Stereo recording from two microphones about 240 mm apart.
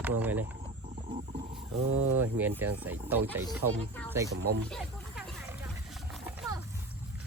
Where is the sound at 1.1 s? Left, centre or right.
Right.